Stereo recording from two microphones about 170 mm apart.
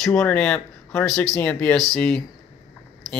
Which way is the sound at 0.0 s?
5° left (ahead or behind).